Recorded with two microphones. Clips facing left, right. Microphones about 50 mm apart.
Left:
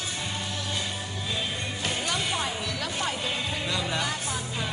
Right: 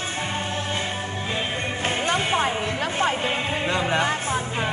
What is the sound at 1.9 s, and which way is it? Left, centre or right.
Music, right.